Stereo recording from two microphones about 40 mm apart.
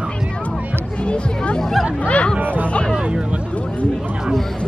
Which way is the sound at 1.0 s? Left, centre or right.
Left.